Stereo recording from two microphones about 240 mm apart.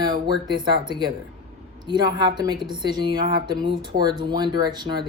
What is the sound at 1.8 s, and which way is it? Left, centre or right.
Speech, centre.